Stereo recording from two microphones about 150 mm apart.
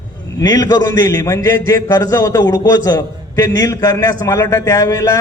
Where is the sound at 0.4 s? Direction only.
25° left (ahead or behind).